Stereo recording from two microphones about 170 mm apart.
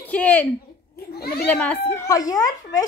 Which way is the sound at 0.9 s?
65° left (ahead or behind).